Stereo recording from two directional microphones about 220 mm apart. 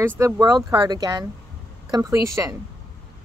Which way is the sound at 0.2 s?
15° right (ahead or behind).